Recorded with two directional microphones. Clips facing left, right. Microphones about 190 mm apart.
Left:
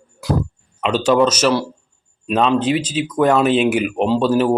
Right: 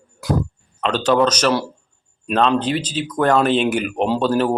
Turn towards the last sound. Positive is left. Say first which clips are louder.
# left 2 dB
turn(degrees=5)  # may be behind; listen again after turning